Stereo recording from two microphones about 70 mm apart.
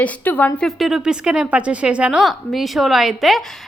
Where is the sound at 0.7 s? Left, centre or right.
Centre.